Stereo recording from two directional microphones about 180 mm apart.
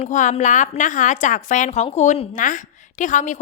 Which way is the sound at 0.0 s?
45° left (ahead or behind).